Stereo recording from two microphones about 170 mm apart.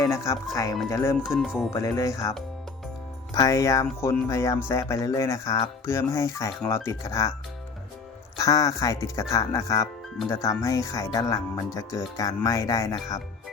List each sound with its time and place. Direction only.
0.0 s speech: 15° left (ahead or behind)
1.2 s speech: 5° right (ahead or behind)
1.7 s speech: 20° left (ahead or behind)
3.3 s speech: 20° left (ahead or behind)
8.4 s speech: 20° left (ahead or behind)